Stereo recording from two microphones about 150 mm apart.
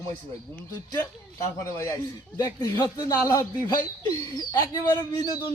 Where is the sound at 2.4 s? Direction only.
25° left (ahead or behind).